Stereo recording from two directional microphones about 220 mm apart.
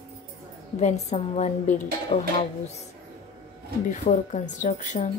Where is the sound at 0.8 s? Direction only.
30° left (ahead or behind).